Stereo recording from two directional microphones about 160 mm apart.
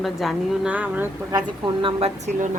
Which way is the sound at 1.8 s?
45° right (ahead or behind).